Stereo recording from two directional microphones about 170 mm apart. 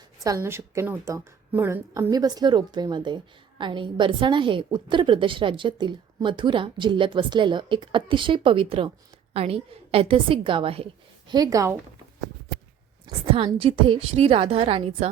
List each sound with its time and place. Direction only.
0.2 s a woman's voice: 20° right (ahead or behind)
11.3 s a woman's voice: 20° right (ahead or behind)
13.1 s a woman's voice: 30° right (ahead or behind)